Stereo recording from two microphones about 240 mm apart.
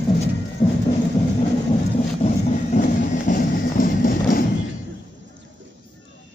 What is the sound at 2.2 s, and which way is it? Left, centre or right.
Music, left.